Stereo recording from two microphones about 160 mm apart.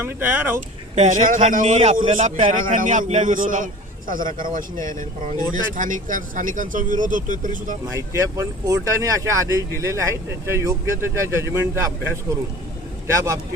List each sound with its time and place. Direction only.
0.0 s speech: 10° right (ahead or behind)
0.5 s a man's voice: 50° right (ahead or behind)
7.9 s speech: 20° right (ahead or behind)